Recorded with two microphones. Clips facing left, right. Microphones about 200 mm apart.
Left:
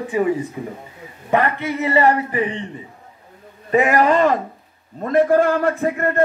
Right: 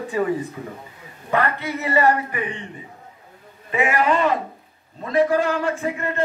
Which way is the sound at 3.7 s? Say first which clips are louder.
Left 5 dB; 40° left (ahead or behind).